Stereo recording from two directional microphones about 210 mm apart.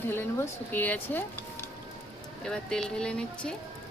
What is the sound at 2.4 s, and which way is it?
Speech, 5° left (ahead or behind).